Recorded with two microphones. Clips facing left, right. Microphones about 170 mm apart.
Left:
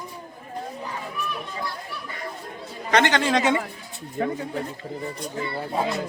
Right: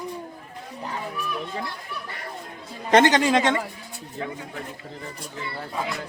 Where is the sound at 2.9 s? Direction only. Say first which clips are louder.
Right 4 dB; 45° right (ahead or behind).